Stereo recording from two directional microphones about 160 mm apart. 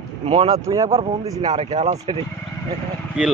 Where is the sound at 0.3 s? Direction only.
35° right (ahead or behind).